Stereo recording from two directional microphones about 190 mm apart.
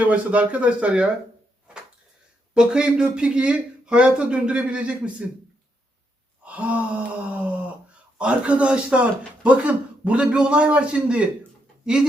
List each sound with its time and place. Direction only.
0.0 s gasp: 5° right (ahead or behind)
2.6 s speech: 5° right (ahead or behind)
6.4 s gasp: 5° right (ahead or behind)
8.2 s speech: 5° right (ahead or behind)